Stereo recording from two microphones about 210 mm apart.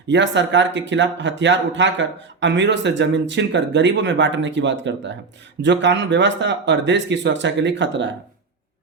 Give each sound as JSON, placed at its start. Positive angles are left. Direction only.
{"t": 0.1, "sound": "speech", "side_deg": -60}